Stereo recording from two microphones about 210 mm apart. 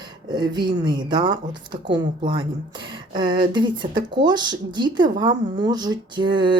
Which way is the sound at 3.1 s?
20° right (ahead or behind).